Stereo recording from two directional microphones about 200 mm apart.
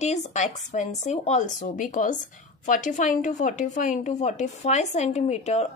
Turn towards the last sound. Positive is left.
turn(degrees=35)  # may be behind; listen again after turning